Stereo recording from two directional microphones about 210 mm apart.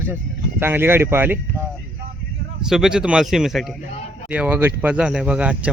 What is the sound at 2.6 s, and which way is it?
Speech, centre (ahead or behind).